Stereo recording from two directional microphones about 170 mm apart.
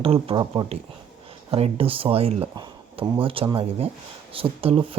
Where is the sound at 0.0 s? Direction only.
35° right (ahead or behind).